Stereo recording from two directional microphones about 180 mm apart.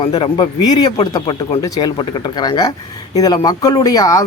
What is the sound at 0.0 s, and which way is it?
Speech, 30° left (ahead or behind).